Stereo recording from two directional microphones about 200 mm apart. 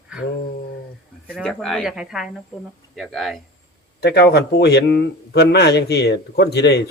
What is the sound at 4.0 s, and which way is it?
A man's voice, 55° left (ahead or behind).